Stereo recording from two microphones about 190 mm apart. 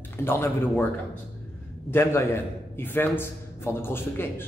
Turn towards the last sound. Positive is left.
turn(degrees=10)  # may be behind; listen again after turning